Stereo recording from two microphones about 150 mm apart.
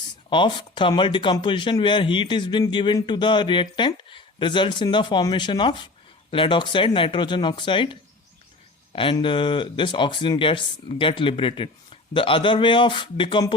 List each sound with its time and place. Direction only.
0.3 s speech: 30° left (ahead or behind)